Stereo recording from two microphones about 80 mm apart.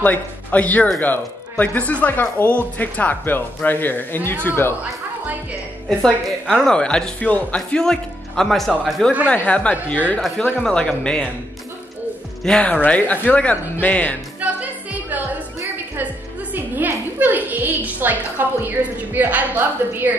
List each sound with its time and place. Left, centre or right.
0.0 s a man's voice: left
5.9 s a woman's voice: centre
9.3 s speech: centre
12.4 s speech: centre
14.4 s music: right
16.5 s a woman's voice: right